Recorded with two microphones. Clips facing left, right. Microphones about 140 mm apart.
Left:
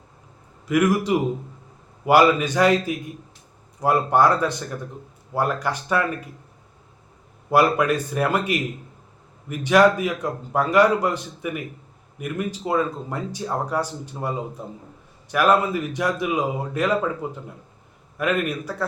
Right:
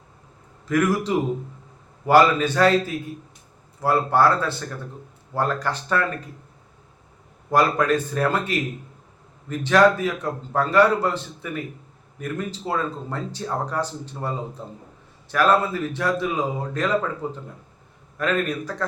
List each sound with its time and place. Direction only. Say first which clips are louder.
0.7 s speech: left 2 dB; 10° left (ahead or behind)
7.5 s speech: left 1 dB; 10° left (ahead or behind)